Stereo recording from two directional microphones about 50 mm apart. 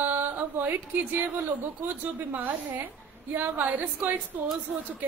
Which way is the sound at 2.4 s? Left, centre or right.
Right.